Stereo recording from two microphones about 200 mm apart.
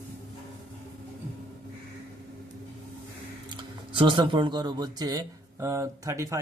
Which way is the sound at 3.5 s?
25° right (ahead or behind).